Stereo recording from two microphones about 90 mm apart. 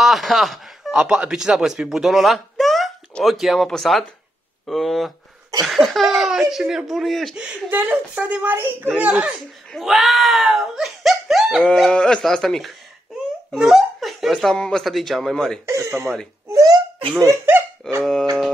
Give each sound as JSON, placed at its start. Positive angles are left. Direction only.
{"t": 0.0, "sound": "a sound", "side_deg": 0}
{"t": 1.0, "sound": "speech", "side_deg": -10}
{"t": 7.7, "sound": "speech", "side_deg": -15}
{"t": 9.7, "sound": "speech", "side_deg": 0}
{"t": 11.9, "sound": "speech", "side_deg": 10}
{"t": 15.6, "sound": "speech", "side_deg": -35}
{"t": 16.4, "sound": "babbling", "side_deg": -35}
{"t": 17.5, "sound": "a sound", "side_deg": -25}